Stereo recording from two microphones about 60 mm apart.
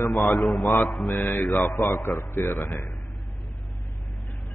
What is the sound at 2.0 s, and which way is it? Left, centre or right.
Speech, left.